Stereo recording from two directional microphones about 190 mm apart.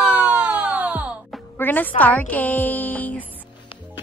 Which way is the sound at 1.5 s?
10° left (ahead or behind).